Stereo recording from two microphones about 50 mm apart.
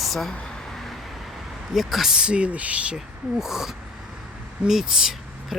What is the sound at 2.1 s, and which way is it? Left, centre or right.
Speech, centre.